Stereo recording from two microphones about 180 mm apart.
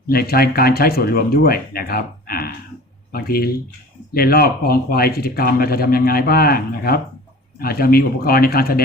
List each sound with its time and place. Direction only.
0.1 s speech: 60° left (ahead or behind)